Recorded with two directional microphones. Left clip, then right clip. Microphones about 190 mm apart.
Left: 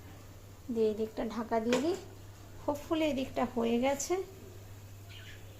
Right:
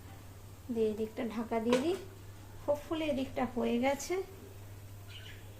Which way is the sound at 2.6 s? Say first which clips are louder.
Left 1 dB; 20° left (ahead or behind).